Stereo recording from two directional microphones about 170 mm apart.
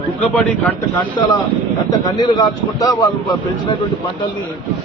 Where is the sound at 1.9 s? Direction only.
25° left (ahead or behind).